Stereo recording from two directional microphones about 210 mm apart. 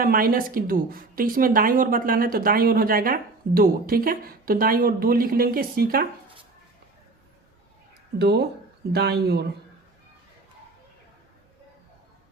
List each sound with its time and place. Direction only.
0.0 s speech: 45° right (ahead or behind)
8.2 s speech: 50° right (ahead or behind)